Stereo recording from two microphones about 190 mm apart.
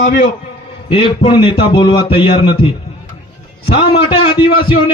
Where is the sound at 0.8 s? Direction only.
25° left (ahead or behind).